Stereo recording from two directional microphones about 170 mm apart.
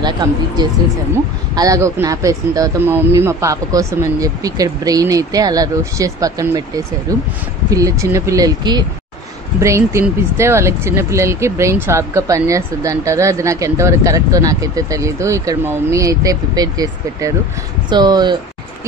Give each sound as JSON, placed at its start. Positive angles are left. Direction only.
{"t": 0.0, "sound": "speech", "side_deg": -25}